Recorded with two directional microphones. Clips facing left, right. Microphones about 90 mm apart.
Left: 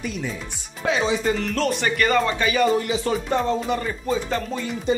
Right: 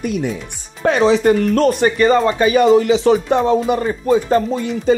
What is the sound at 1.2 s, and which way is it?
Speech, 50° right (ahead or behind).